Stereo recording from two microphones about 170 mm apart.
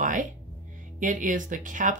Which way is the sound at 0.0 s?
50° right (ahead or behind).